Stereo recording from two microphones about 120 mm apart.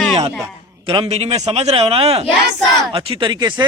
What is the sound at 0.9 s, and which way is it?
A man's voice, 50° right (ahead or behind).